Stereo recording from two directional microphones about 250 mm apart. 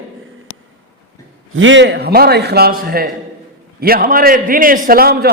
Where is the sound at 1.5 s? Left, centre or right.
Right.